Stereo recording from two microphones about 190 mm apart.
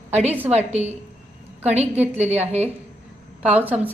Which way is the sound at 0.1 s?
35° right (ahead or behind).